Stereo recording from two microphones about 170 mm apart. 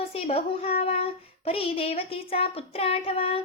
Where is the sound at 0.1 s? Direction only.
35° left (ahead or behind).